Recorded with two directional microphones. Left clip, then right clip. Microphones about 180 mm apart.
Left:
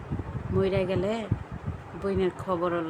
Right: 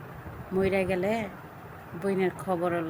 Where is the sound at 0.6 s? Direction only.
15° left (ahead or behind).